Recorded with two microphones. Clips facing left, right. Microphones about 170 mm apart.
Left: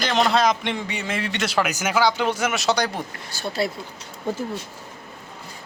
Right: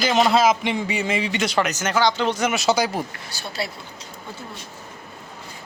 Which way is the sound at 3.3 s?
50° left (ahead or behind).